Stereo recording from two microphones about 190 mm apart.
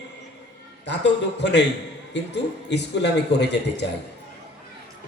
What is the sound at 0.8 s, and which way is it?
A man's voice, 65° left (ahead or behind).